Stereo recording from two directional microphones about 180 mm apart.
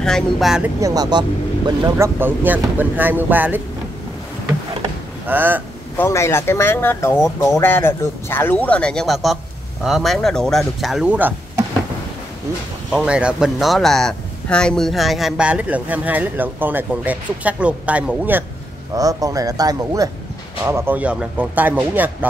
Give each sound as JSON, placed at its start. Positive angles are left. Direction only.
{"t": 0.0, "sound": "speech", "side_deg": 0}
{"t": 0.7, "sound": "speech", "side_deg": -20}
{"t": 5.2, "sound": "speech", "side_deg": -10}
{"t": 5.9, "sound": "speech", "side_deg": 15}
{"t": 12.9, "sound": "speech", "side_deg": -5}
{"t": 18.9, "sound": "speech", "side_deg": -20}